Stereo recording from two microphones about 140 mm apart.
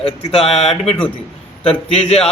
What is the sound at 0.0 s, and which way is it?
Speech, 40° left (ahead or behind).